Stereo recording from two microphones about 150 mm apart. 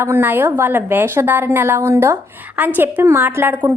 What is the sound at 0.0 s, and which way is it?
A woman's voice, 15° right (ahead or behind).